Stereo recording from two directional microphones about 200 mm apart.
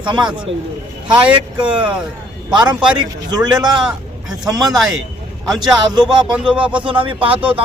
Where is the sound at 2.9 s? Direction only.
20° right (ahead or behind).